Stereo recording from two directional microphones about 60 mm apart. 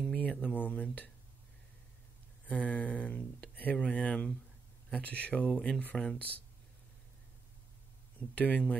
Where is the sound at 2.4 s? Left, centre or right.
Left.